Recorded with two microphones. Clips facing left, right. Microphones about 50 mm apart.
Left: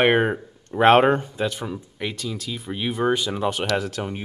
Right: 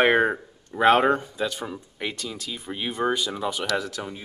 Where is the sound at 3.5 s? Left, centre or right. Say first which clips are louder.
Left 3 dB; left.